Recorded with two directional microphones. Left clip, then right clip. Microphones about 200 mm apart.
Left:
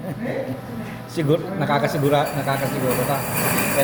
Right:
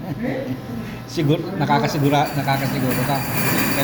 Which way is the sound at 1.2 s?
10° left (ahead or behind).